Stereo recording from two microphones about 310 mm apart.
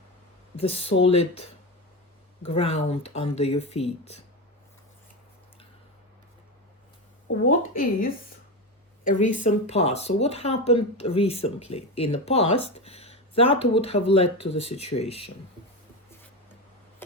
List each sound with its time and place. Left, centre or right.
0.7 s speech: centre
2.5 s speech: centre
7.3 s speech: left